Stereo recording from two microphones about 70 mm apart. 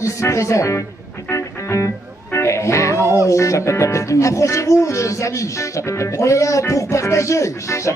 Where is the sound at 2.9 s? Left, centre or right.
Right.